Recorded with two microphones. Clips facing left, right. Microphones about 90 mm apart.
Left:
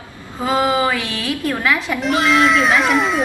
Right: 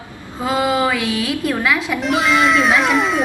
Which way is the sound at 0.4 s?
5° right (ahead or behind).